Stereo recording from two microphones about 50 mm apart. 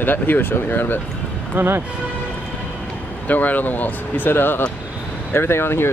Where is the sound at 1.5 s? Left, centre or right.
Right.